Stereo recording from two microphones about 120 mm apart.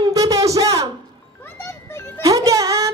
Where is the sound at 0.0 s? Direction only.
30° right (ahead or behind).